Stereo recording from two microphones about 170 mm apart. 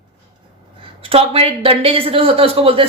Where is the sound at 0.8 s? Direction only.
35° right (ahead or behind).